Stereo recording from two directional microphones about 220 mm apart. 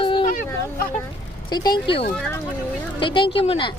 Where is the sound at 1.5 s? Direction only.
20° left (ahead or behind).